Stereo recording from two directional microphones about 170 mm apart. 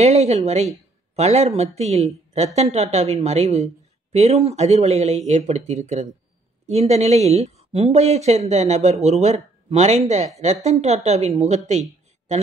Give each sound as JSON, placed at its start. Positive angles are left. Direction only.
{"t": 0.0, "sound": "a woman's voice", "side_deg": -40}